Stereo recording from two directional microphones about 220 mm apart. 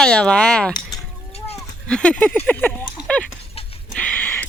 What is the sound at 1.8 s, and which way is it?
Speech, 5° left (ahead or behind).